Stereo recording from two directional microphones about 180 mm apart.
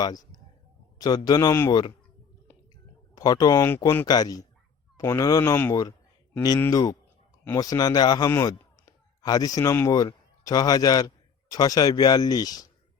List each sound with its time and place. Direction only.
0.0 s a man's voice: 20° left (ahead or behind)
3.2 s a man's voice: 20° left (ahead or behind)